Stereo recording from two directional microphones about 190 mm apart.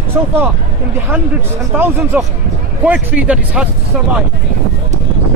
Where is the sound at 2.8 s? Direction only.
5° right (ahead or behind).